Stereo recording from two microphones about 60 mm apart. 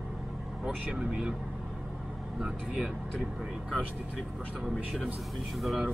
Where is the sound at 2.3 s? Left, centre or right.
Centre.